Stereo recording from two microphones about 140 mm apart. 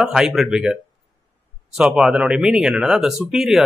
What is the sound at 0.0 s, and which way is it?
Speech, 5° right (ahead or behind).